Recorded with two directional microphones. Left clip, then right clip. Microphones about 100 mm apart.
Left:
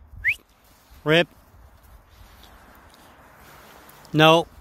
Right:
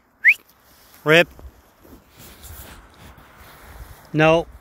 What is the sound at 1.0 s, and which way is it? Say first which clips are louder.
Speech: right 5 dB; 25° left (ahead or behind).